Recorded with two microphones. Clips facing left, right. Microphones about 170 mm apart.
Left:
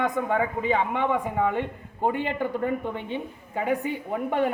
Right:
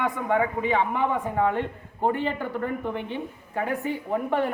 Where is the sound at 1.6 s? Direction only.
15° left (ahead or behind).